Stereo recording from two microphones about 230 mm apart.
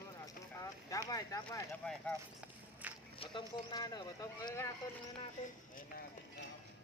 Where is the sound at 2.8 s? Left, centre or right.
Centre.